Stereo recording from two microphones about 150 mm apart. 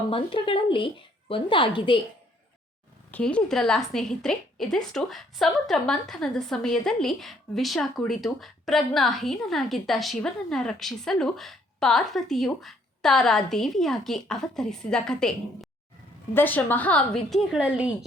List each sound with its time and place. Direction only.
0.1 s speech: 35° left (ahead or behind)
3.1 s a woman's voice: 10° left (ahead or behind); by 17.9 s 5° right (ahead or behind)